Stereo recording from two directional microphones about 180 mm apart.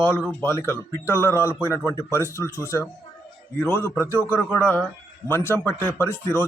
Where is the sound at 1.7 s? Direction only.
15° right (ahead or behind).